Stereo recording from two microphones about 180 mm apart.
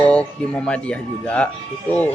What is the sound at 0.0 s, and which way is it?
A man's voice, 5° left (ahead or behind).